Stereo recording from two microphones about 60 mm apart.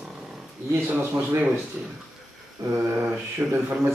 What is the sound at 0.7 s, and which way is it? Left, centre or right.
Speech, right.